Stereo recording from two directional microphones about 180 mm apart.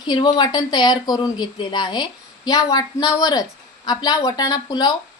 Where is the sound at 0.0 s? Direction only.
25° left (ahead or behind).